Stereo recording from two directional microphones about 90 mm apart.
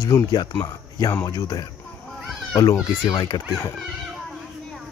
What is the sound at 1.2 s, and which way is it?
Speech, 50° left (ahead or behind).